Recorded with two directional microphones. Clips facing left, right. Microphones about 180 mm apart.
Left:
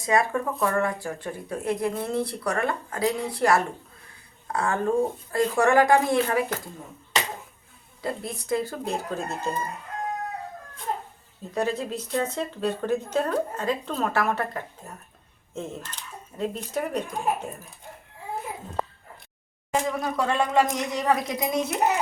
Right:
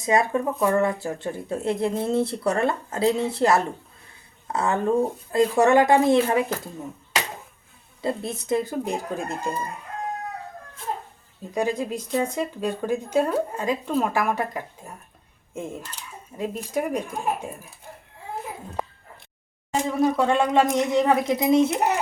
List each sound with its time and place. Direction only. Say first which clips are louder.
0.0 s speech: right 2 dB; 20° right (ahead or behind)
8.0 s speech: right 4 dB; 25° right (ahead or behind)
11.5 s speech: right 2 dB; 15° right (ahead or behind)
20.0 s speech: right 5 dB; 25° right (ahead or behind)